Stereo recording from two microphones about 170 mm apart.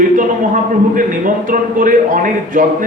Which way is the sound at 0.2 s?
50° right (ahead or behind).